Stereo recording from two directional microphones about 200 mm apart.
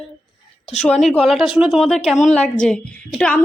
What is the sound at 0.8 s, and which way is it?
Speech, 5° left (ahead or behind).